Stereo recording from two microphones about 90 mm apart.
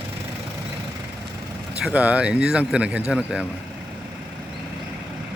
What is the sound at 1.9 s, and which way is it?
Speech, 15° right (ahead or behind).